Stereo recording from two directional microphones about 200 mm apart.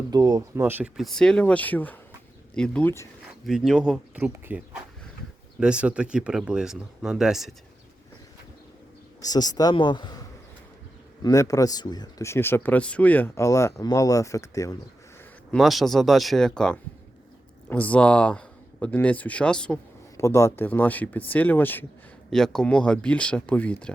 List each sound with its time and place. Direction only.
0.1 s speech: 20° right (ahead or behind)
1.0 s speech: 5° left (ahead or behind)
3.4 s speech: centre (ahead or behind)
9.2 s a man's voice: 20° left (ahead or behind)
15.5 s speech: centre (ahead or behind)